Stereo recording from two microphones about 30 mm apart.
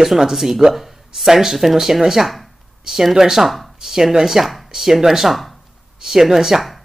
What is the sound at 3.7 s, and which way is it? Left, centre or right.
Speech, centre.